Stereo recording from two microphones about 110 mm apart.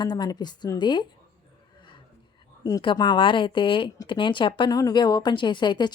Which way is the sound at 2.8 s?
45° left (ahead or behind).